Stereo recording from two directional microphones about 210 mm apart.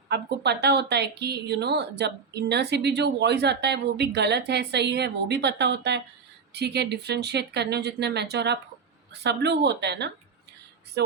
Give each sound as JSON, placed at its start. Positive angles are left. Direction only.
{"t": 0.1, "sound": "a woman's voice", "side_deg": -50}
{"t": 11.0, "sound": "music", "side_deg": -50}